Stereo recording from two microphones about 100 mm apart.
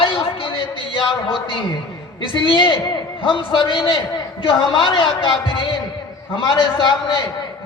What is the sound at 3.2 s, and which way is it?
A man's voice, 55° left (ahead or behind).